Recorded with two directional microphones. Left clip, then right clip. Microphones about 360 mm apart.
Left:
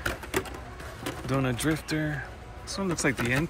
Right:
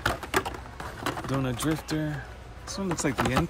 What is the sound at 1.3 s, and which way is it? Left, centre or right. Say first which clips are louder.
Speech: left 4 dB; centre.